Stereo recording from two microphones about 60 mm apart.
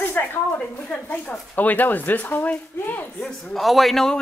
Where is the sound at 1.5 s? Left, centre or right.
Left.